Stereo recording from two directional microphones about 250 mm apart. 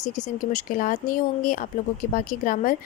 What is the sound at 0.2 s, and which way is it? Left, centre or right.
A woman's voice, left.